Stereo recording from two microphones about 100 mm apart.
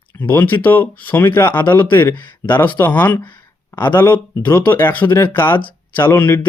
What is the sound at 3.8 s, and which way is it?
Speech, 20° left (ahead or behind).